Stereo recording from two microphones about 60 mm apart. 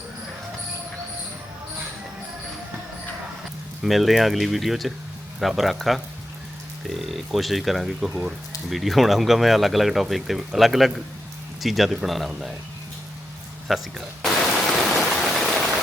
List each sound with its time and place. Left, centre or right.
3.8 s speech: centre
13.7 s speech: centre
14.5 s stream: centre